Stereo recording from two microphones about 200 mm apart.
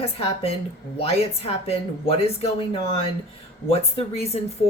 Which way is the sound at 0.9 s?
30° left (ahead or behind).